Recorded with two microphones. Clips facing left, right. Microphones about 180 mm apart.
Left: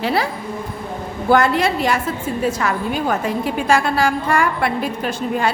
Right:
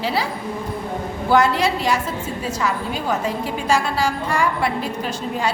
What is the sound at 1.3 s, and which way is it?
A woman's voice, 55° left (ahead or behind).